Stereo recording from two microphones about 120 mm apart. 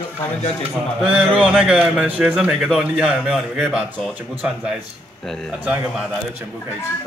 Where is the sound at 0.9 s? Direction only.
5° right (ahead or behind).